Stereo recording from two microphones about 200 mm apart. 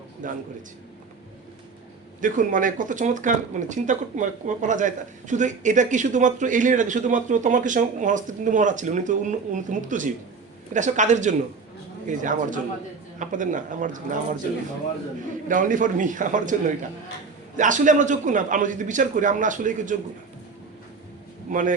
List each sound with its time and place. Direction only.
0.2 s speech: 40° right (ahead or behind)
2.2 s speech: 40° right (ahead or behind)
15.4 s speech: 40° right (ahead or behind)
21.5 s speech: 40° right (ahead or behind)